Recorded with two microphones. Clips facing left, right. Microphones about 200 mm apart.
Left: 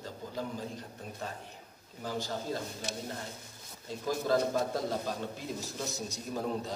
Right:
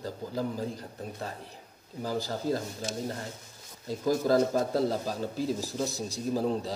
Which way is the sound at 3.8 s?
40° right (ahead or behind).